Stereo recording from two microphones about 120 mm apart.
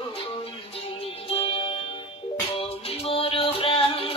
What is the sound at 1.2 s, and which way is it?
Music, 50° left (ahead or behind).